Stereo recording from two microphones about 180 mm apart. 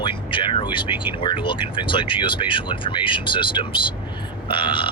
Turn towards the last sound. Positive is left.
turn(degrees=30)  # may be behind; listen again after turning